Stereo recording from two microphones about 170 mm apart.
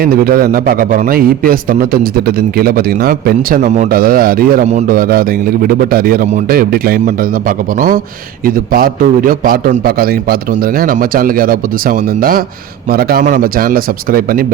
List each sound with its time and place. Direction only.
0.0 s a man's voice: 60° right (ahead or behind)
4.6 s a man's voice: 40° right (ahead or behind)
4.9 s a man's voice: 60° right (ahead or behind)